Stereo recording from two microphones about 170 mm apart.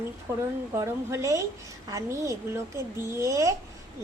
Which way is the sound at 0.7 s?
15° right (ahead or behind).